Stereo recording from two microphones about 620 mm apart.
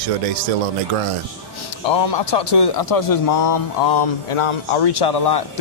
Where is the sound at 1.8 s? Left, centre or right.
Left.